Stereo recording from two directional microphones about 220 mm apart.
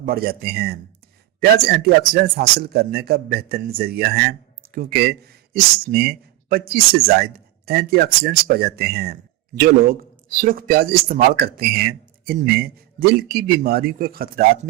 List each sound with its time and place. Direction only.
0.0 s a man's voice: 45° right (ahead or behind)